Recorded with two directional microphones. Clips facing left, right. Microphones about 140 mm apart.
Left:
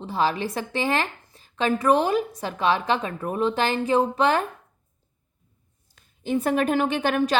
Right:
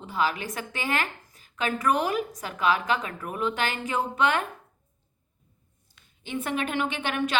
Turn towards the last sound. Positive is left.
turn(degrees=35)  # may be behind; listen again after turning